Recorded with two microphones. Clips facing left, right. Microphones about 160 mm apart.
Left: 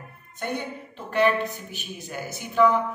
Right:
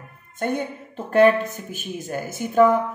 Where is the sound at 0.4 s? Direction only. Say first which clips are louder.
Right 5 dB; 50° right (ahead or behind).